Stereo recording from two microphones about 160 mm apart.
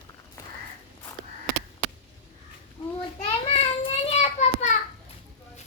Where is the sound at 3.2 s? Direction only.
35° left (ahead or behind).